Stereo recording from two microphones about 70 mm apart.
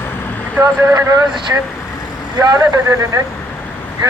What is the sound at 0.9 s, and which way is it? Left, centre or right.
Speech, right.